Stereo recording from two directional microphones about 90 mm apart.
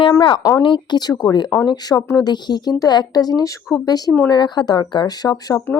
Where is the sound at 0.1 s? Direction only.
60° left (ahead or behind).